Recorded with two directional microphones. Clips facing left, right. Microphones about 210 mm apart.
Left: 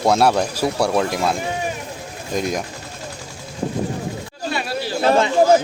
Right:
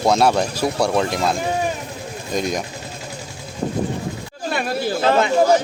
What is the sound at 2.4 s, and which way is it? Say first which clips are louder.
Speech: even; 10° left (ahead or behind).